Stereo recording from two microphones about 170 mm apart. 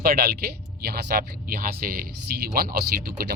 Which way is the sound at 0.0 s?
60° right (ahead or behind).